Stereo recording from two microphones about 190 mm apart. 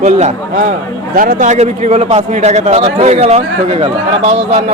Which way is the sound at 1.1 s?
45° right (ahead or behind).